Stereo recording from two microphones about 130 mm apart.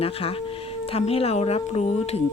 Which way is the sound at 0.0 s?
50° left (ahead or behind).